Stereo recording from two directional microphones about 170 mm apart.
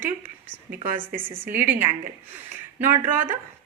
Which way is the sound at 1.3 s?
10° right (ahead or behind).